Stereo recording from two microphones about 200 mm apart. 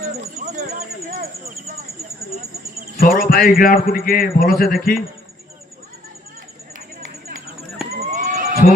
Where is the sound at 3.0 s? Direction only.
45° left (ahead or behind).